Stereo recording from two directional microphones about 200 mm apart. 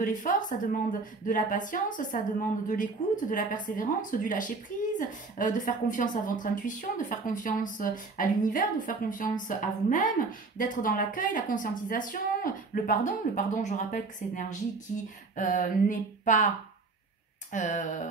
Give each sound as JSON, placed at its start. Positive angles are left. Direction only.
{"t": 0.0, "sound": "a woman's voice", "side_deg": 40}
{"t": 17.5, "sound": "a woman's voice", "side_deg": 35}